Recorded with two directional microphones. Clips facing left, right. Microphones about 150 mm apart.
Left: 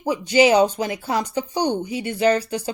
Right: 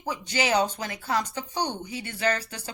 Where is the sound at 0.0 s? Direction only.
15° left (ahead or behind).